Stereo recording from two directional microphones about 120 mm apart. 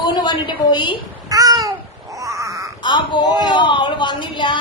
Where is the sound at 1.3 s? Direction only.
30° right (ahead or behind).